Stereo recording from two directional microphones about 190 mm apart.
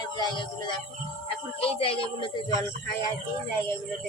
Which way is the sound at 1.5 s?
30° left (ahead or behind).